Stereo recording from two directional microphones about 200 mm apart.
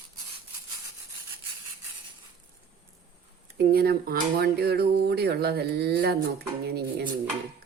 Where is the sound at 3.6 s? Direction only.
50° right (ahead or behind).